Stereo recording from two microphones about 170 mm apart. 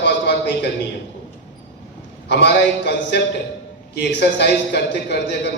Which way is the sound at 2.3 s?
80° left.